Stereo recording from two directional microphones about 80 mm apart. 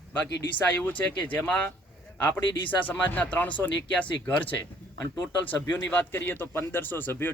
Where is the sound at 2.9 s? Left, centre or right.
Left.